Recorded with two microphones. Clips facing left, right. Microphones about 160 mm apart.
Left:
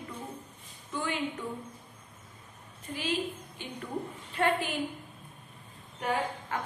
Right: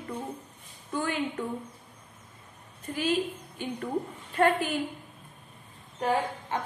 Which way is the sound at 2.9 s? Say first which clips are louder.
Right 5 dB; 50° right (ahead or behind).